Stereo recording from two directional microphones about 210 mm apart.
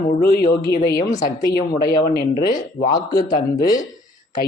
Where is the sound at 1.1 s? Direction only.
20° left (ahead or behind).